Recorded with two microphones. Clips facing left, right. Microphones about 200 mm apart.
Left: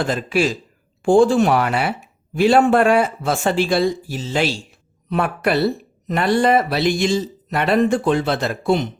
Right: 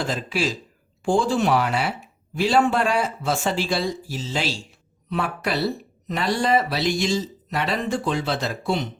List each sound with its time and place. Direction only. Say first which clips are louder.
0.0 s speech: left 6 dB; 55° left (ahead or behind)